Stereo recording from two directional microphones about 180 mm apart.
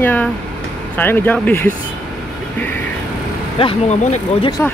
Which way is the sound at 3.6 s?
35° left (ahead or behind).